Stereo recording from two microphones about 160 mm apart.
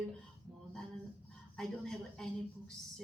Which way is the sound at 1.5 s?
5° left (ahead or behind).